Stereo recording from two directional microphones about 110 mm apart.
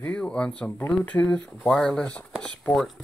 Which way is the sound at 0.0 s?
10° left (ahead or behind).